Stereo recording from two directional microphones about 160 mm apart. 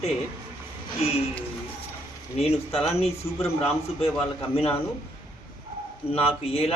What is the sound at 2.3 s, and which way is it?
Speech, 40° left (ahead or behind).